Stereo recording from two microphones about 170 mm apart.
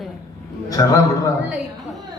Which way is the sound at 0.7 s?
20° left (ahead or behind).